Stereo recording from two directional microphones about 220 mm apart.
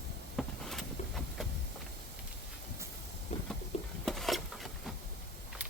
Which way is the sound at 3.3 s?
30° left (ahead or behind).